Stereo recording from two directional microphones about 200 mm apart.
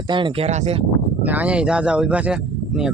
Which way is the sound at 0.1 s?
25° right (ahead or behind).